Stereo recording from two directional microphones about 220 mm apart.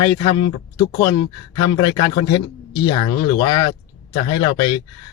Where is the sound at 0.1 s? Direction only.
20° left (ahead or behind).